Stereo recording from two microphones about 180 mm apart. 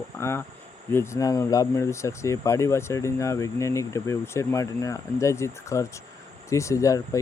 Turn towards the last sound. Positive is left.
turn(degrees=15)  # may be behind; listen again after turning